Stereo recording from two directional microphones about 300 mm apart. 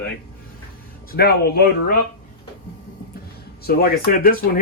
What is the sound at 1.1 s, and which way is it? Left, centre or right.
Speech, left.